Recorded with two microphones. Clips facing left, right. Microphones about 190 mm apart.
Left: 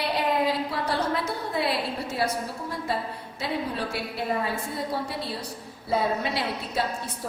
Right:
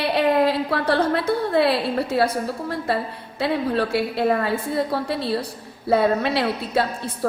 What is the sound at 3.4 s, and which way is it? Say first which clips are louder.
A woman's voice: right 8 dB; 65° right (ahead or behind).